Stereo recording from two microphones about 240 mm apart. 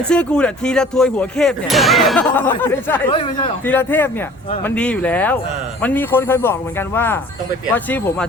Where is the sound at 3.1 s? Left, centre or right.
Left.